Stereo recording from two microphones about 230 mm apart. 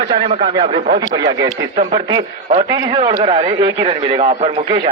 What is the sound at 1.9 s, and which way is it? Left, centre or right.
A man's voice, centre.